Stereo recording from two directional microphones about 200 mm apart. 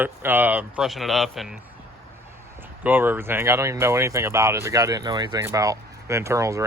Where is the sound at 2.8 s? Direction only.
10° right (ahead or behind).